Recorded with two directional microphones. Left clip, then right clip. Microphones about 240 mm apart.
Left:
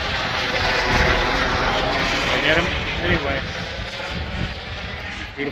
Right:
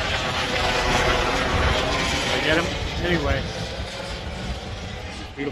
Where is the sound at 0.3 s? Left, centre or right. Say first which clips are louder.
Left 4 dB; centre.